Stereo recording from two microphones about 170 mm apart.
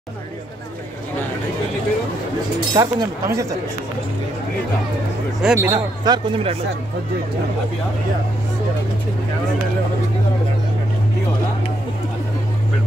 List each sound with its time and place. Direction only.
2.7 s speech: 20° right (ahead or behind)
5.4 s speech: 5° right (ahead or behind)
5.7 s speech: 25° right (ahead or behind)